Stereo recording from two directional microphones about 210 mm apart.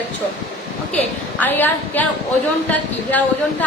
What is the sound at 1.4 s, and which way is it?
A woman's voice, 10° left (ahead or behind).